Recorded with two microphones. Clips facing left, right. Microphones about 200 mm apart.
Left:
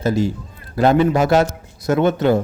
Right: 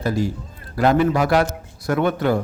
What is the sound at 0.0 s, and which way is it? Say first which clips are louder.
A man's voice: left 3 dB; 25° left (ahead or behind).